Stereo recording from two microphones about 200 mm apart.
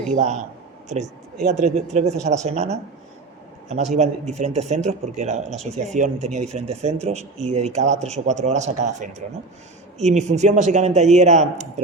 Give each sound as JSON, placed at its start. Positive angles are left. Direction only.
{"t": 0.1, "sound": "speech", "side_deg": -35}
{"t": 1.5, "sound": "speech", "side_deg": -35}
{"t": 3.9, "sound": "speech", "side_deg": -35}